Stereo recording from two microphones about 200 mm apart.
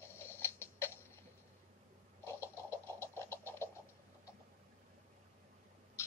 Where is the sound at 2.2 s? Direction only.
15° left (ahead or behind).